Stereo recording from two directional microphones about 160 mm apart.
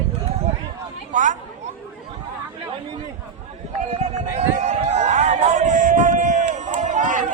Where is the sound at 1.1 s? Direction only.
50° right (ahead or behind).